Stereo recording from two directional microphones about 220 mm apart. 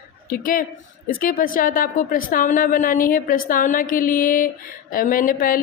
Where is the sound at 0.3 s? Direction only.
40° left (ahead or behind).